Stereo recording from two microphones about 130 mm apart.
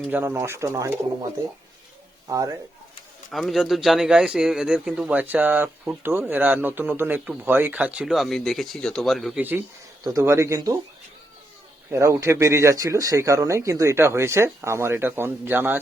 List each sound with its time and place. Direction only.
0.1 s speech: 15° right (ahead or behind)
2.2 s speech: 25° right (ahead or behind)
3.3 s a man's voice: centre (ahead or behind)
9.4 s a man's voice: 15° right (ahead or behind)
11.9 s speech: 20° right (ahead or behind)